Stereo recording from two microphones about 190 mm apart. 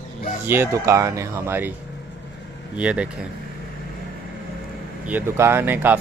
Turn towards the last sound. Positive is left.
turn(degrees=-10)  # may be behind; listen again after turning